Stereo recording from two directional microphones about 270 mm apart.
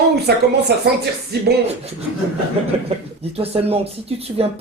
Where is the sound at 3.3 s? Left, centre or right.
Right.